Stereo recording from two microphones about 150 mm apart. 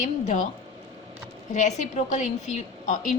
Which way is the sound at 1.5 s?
55° left (ahead or behind).